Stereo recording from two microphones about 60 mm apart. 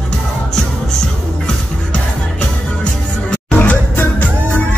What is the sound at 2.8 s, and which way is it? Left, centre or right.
Music, left.